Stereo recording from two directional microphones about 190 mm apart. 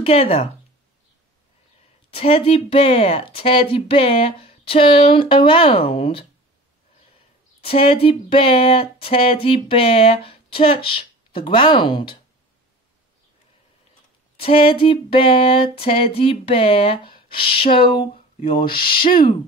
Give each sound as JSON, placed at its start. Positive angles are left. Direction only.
{"t": 0.0, "sound": "speech", "side_deg": 30}
{"t": 2.0, "sound": "speech", "side_deg": 30}
{"t": 7.6, "sound": "speech", "side_deg": 30}
{"t": 14.3, "sound": "speech", "side_deg": 30}